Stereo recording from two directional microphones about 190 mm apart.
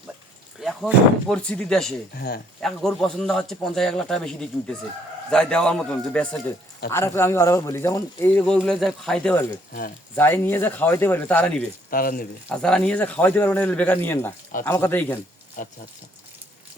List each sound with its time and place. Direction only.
0.6 s a man's voice: centre (ahead or behind)
2.1 s speech: 55° left (ahead or behind)
2.6 s a man's voice: centre (ahead or behind)
11.9 s speech: 50° left (ahead or behind)
12.5 s a man's voice: 5° left (ahead or behind)
15.6 s speech: 45° left (ahead or behind)